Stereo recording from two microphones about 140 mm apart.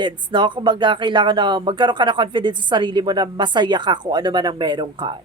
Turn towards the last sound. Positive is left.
turn(degrees=-30)  # may be behind; listen again after turning